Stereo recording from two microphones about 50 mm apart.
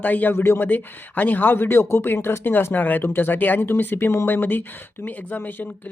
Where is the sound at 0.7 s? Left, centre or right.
Left.